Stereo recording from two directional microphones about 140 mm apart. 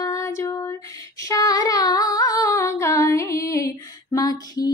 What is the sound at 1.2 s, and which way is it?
Female singing, 25° left (ahead or behind).